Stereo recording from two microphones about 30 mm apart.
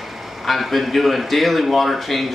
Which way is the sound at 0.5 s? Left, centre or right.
Centre.